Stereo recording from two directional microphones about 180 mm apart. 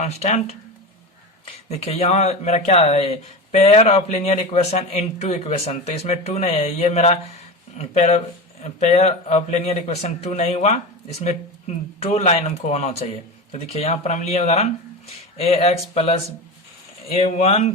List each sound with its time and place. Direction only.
0.0 s speech: 40° left (ahead or behind)
1.8 s speech: 35° left (ahead or behind)
12.0 s speech: 40° left (ahead or behind)